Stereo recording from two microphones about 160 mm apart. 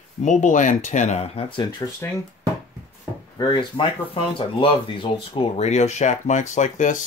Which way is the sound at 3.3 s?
30° left (ahead or behind).